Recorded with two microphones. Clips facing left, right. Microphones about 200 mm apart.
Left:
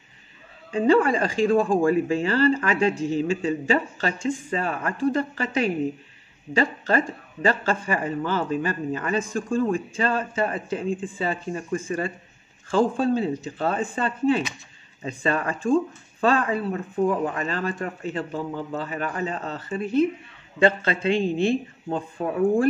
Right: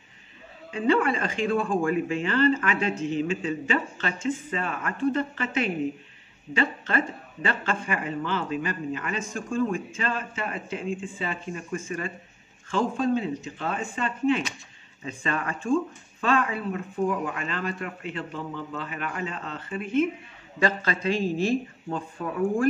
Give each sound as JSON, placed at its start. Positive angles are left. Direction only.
{"t": 0.7, "sound": "speech", "side_deg": 35}